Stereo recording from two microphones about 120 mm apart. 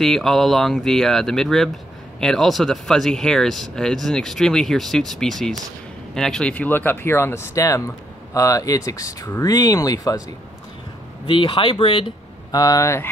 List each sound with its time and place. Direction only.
0.0 s speech: centre (ahead or behind); by 10.2 s 30° left (ahead or behind)
11.2 s speech: 45° left (ahead or behind)
12.4 s speech: 30° left (ahead or behind)